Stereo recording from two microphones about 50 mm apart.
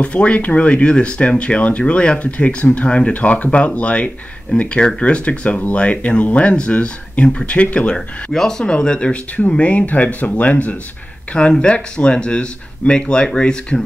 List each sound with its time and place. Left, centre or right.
0.0 s speech: left
8.3 s speech: centre; by 10.8 s left
11.3 s speech: centre